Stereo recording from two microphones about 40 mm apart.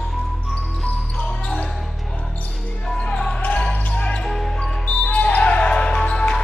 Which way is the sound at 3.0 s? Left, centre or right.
Left.